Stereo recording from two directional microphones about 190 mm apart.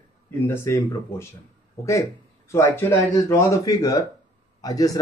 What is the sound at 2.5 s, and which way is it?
Speech, 10° left (ahead or behind).